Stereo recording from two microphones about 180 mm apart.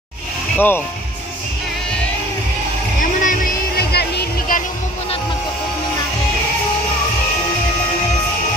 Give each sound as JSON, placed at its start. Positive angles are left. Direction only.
{"t": 0.6, "sound": "speech", "side_deg": 10}
{"t": 3.0, "sound": "music", "side_deg": 45}
{"t": 3.9, "sound": "music", "side_deg": 65}